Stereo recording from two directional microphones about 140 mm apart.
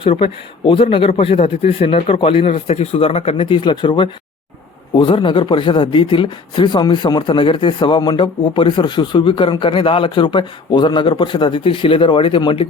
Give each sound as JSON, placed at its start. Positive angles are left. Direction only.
{"t": 0.0, "sound": "speech", "side_deg": 40}